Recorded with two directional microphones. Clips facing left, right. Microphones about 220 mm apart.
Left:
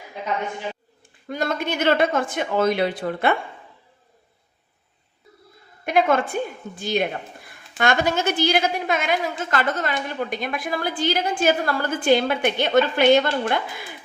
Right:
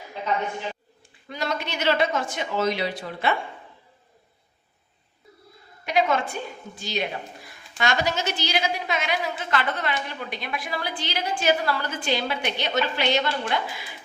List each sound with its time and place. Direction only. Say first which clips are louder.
1.3 s a woman's voice: left 5 dB; 50° left (ahead or behind)
5.8 s a woman's voice: left 4 dB; 50° left (ahead or behind)